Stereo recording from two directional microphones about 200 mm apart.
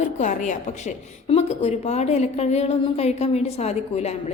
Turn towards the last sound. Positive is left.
turn(degrees=35)  # may be behind; listen again after turning